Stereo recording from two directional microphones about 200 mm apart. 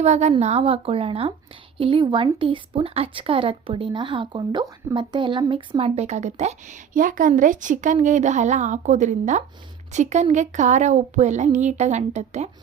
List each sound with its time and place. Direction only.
0.0 s a woman's voice: 35° right (ahead or behind)